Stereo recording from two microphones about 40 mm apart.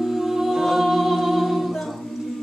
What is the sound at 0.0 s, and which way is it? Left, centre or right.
Music, centre.